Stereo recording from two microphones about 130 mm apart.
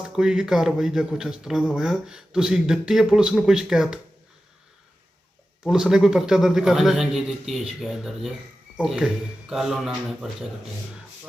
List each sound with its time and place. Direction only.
0.0 s speech: 5° right (ahead or behind)
5.6 s speech: 5° right (ahead or behind)